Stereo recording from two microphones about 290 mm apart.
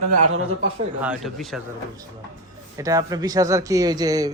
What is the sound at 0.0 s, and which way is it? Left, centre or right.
Speech, right.